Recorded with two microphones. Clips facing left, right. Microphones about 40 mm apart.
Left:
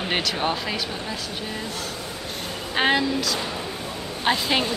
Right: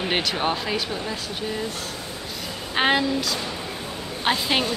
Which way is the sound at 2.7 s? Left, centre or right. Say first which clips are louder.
Even; centre.